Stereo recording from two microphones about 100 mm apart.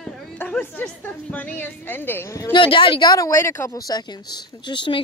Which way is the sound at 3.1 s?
30° left (ahead or behind).